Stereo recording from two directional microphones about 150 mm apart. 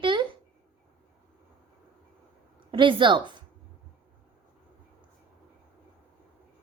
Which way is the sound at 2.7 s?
30° right (ahead or behind).